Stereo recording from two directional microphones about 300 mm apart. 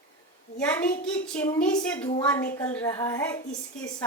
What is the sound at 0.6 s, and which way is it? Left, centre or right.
A child's voice, centre.